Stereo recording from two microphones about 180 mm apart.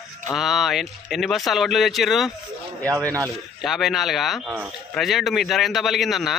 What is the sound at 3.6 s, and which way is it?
Speech, centre (ahead or behind).